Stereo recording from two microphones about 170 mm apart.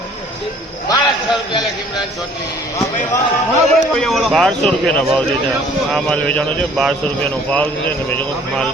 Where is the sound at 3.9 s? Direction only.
Centre (ahead or behind).